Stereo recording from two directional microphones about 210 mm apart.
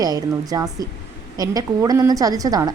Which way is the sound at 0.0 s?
20° right (ahead or behind).